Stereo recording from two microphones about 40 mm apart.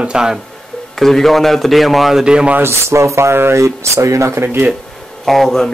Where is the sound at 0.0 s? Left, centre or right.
Centre.